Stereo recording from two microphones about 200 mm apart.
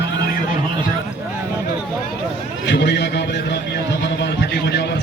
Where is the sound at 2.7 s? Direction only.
60° left (ahead or behind).